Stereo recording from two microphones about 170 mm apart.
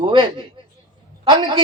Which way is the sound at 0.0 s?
25° right (ahead or behind).